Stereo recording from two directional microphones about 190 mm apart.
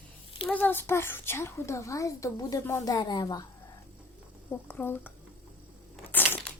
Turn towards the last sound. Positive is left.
turn(degrees=10)  # may be behind; listen again after turning